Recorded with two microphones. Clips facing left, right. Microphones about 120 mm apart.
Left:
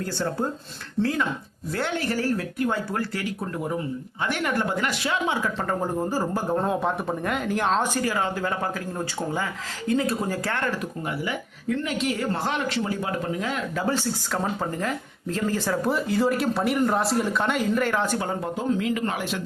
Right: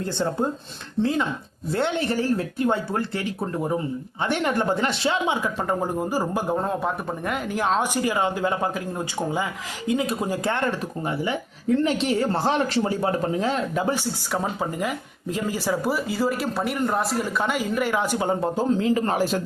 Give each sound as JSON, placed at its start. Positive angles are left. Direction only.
{"t": 0.0, "sound": "speech", "side_deg": -20}
{"t": 5.2, "sound": "speech", "side_deg": -15}
{"t": 6.6, "sound": "speech", "side_deg": 0}
{"t": 7.9, "sound": "speech", "side_deg": -15}
{"t": 13.8, "sound": "speech", "side_deg": -15}
{"t": 18.3, "sound": "speech", "side_deg": -30}